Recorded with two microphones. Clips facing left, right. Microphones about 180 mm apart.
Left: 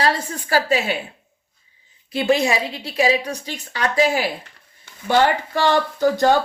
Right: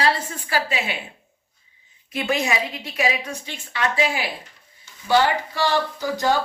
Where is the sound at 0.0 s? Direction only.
40° left (ahead or behind).